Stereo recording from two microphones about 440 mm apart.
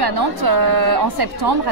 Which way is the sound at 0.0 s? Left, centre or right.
Right.